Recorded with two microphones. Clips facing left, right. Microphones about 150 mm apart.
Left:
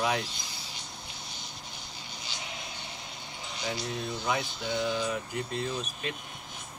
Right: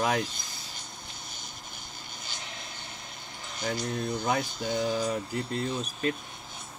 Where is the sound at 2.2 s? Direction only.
45° right (ahead or behind).